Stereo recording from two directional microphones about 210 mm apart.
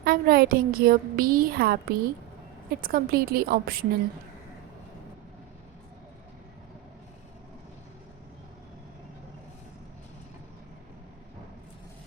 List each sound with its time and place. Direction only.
0.0 s a woman's voice: 45° right (ahead or behind)